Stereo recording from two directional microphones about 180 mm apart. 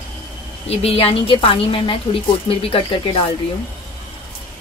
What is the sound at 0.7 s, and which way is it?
A woman's voice, 30° left (ahead or behind).